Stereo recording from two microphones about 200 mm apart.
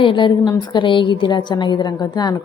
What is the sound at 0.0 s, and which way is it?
A woman's voice, 25° left (ahead or behind).